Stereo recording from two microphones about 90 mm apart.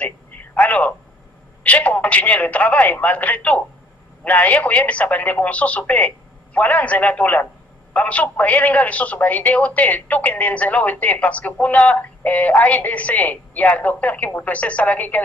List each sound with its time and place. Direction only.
0.0 s telephone: 15° left (ahead or behind)
1.6 s a man's voice: 15° left (ahead or behind)